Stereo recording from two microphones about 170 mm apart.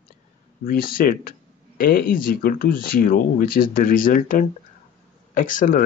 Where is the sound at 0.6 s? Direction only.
60° left (ahead or behind).